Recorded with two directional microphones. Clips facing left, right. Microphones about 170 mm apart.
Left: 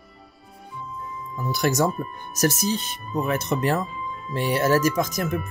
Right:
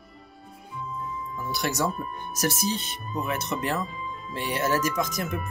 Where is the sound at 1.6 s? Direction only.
45° left (ahead or behind).